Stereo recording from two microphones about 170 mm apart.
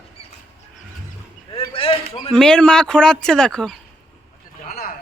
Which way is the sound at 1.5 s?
35° left (ahead or behind).